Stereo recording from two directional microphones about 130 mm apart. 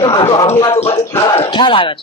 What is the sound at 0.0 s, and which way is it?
Speech, 35° left (ahead or behind).